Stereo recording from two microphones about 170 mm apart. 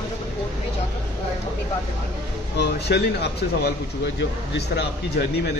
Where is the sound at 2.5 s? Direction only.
80° left.